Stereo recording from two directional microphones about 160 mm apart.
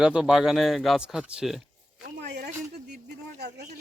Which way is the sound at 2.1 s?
90° right.